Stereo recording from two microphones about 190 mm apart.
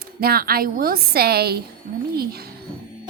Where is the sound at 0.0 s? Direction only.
55° right (ahead or behind).